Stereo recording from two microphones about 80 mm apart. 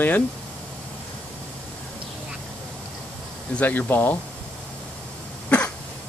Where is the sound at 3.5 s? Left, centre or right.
Left.